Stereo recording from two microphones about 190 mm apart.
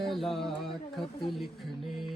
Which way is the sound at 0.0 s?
Centre (ahead or behind).